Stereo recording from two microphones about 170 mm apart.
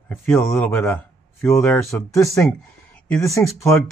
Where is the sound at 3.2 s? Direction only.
20° left (ahead or behind).